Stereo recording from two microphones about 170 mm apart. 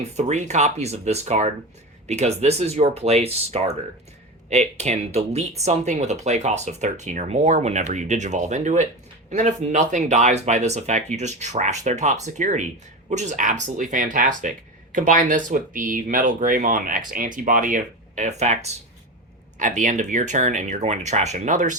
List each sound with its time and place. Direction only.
0.0 s speech: 40° right (ahead or behind)